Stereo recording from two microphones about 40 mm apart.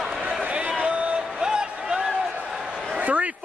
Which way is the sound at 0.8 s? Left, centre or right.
Right.